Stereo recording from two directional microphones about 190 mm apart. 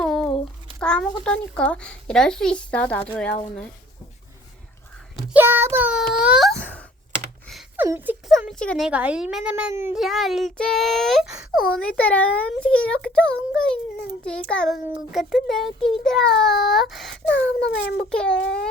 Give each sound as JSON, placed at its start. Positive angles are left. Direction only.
{"t": 0.0, "sound": "a sound", "side_deg": 0}
{"t": 1.2, "sound": "speech", "side_deg": 5}
{"t": 5.1, "sound": "a child's voice", "side_deg": -10}
{"t": 7.8, "sound": "a child's voice", "side_deg": -10}
{"t": 8.9, "sound": "a child's voice", "side_deg": -5}
{"t": 18.3, "sound": "a child's voice", "side_deg": 70}